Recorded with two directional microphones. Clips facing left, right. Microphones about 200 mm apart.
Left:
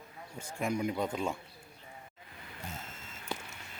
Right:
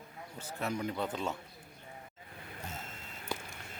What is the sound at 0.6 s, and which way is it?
Speech, 10° left (ahead or behind).